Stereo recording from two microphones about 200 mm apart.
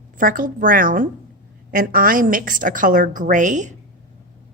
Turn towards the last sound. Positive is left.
turn(degrees=-40)  # may be behind; listen again after turning